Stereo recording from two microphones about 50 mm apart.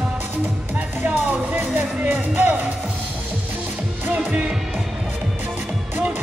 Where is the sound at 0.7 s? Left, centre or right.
Right.